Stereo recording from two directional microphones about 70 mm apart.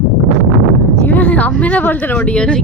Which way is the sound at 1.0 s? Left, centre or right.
Left.